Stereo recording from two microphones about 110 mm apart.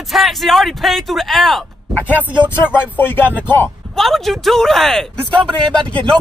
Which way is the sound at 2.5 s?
20° left (ahead or behind).